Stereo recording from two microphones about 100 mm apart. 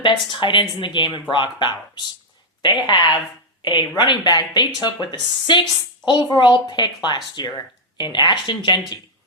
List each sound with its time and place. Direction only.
0.0 s a woman's voice: 55° left (ahead or behind)